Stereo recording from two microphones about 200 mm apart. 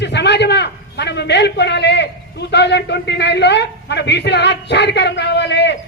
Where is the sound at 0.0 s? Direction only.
60° left (ahead or behind).